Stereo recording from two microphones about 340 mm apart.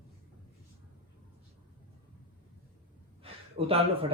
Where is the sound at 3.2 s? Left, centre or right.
Centre.